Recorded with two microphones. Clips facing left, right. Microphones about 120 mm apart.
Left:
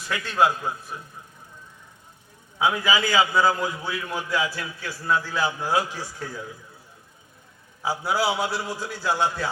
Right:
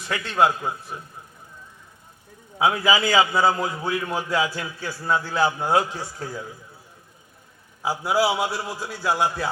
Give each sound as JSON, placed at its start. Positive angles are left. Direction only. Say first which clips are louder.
{"t": 0.1, "sound": "a man's voice", "louder": "right 1 dB", "side_deg": -25}
{"t": 2.6, "sound": "a man's voice", "louder": "right 2 dB", "side_deg": -30}
{"t": 7.8, "sound": "a man's voice", "louder": "right 3 dB", "side_deg": -20}